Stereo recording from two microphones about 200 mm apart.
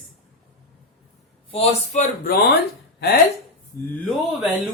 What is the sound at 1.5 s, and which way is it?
Speech, 30° left (ahead or behind).